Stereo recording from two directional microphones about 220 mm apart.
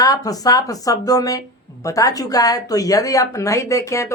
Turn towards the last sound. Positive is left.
turn(degrees=15)  # may be behind; listen again after turning